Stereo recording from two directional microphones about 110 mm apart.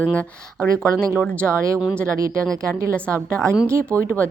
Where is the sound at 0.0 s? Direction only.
15° left (ahead or behind).